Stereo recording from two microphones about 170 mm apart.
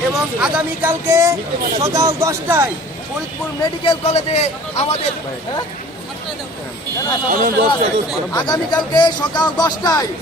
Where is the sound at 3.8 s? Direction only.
35° left (ahead or behind).